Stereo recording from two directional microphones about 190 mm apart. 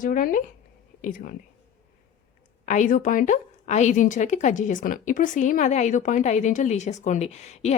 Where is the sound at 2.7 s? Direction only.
45° left (ahead or behind).